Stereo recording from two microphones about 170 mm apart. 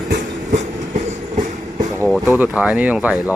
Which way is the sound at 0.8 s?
45° right (ahead or behind).